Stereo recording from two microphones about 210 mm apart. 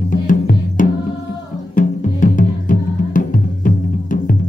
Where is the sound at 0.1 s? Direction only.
40° left (ahead or behind).